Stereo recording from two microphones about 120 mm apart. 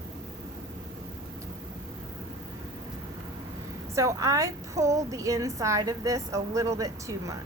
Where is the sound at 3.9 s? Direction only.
25° right (ahead or behind).